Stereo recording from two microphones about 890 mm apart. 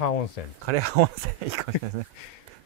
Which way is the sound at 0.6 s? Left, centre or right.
Right.